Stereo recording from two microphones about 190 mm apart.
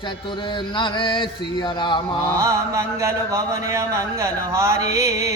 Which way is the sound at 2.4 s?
15° right (ahead or behind).